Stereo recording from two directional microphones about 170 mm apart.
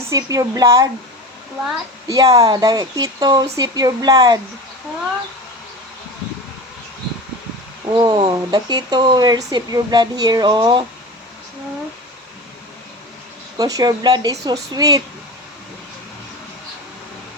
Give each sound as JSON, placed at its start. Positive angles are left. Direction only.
{"t": 0.1, "sound": "speech", "side_deg": -20}
{"t": 2.0, "sound": "speech", "side_deg": -20}
{"t": 7.9, "sound": "speech", "side_deg": -25}
{"t": 13.6, "sound": "speech", "side_deg": -20}